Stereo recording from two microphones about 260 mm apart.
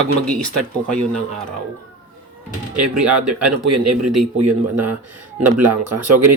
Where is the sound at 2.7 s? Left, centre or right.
Right.